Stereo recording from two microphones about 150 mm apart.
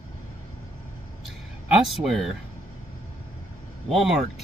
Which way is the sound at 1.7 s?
Centre (ahead or behind).